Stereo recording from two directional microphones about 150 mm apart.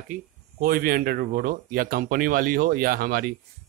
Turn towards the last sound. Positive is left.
turn(degrees=-80)